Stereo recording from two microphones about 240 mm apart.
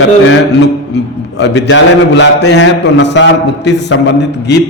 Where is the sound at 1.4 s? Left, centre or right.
Left.